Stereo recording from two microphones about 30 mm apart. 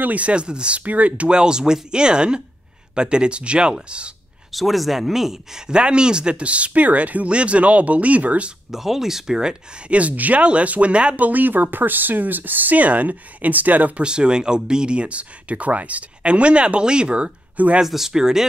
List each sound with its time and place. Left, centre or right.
0.2 s speech: right
0.7 s speech: right
1.3 s speech: right
4.5 s speech: centre
5.7 s speech: right
6.4 s speech: right
7.2 s speech: right
8.7 s speech: centre
9.8 s speech: right
10.4 s speech: right
11.1 s speech: right
13.9 s speech: right
17.8 s speech: centre